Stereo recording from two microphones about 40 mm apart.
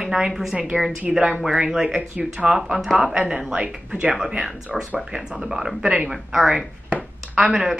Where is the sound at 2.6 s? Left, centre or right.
Centre.